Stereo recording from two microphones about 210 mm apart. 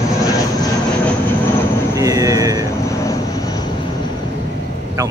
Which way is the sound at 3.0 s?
15° left (ahead or behind).